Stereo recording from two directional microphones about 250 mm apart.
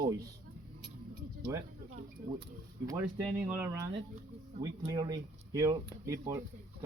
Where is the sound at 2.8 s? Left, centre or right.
Centre.